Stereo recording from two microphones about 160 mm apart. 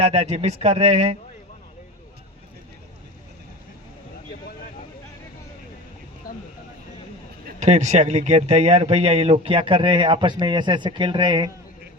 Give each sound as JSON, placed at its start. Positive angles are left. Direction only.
{"t": 0.0, "sound": "speech", "side_deg": -40}
{"t": 6.3, "sound": "a sound", "side_deg": 65}
{"t": 7.6, "sound": "speech", "side_deg": -45}